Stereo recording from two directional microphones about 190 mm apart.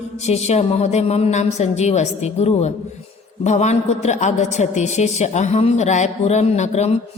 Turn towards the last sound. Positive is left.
turn(degrees=35)  # may be behind; listen again after turning